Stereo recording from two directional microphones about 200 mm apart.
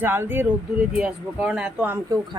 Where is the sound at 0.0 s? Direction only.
10° right (ahead or behind).